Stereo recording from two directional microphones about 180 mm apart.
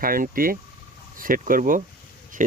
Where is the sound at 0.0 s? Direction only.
50° right (ahead or behind).